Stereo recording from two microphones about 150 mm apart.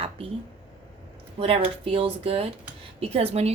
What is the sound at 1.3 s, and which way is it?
A woman's voice, 35° right (ahead or behind).